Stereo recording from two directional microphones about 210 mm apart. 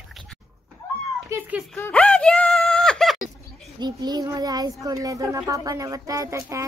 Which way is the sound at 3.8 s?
20° right (ahead or behind).